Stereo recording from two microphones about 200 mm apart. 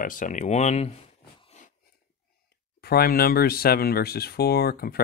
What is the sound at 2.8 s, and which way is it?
Speech, 50° left (ahead or behind).